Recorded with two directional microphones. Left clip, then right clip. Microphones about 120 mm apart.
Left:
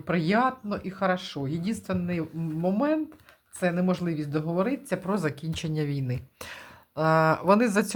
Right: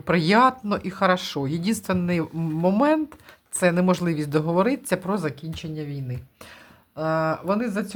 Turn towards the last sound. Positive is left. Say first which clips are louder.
# left 4 dB
turn(degrees=35)  # may be behind; listen again after turning